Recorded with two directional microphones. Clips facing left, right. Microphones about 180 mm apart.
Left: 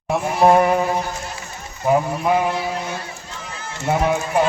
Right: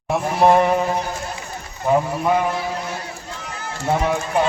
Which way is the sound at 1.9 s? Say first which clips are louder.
Even; 5° left (ahead or behind).